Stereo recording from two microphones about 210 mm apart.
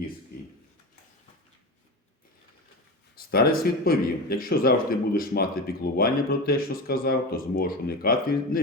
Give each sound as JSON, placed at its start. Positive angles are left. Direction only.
{"t": 3.2, "sound": "speech", "side_deg": 45}